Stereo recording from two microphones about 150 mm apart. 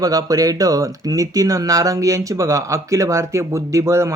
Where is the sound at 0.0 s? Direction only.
25° right (ahead or behind).